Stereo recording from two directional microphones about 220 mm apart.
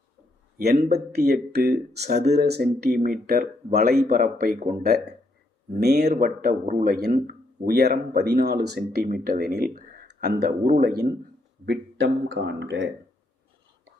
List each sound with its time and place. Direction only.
0.5 s speech: 45° right (ahead or behind)